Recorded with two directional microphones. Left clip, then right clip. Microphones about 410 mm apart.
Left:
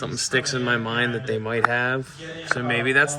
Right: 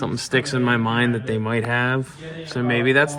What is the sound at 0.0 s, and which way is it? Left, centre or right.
Speech, centre.